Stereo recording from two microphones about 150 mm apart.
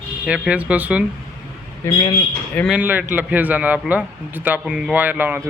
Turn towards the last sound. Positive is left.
turn(degrees=-10)  # may be behind; listen again after turning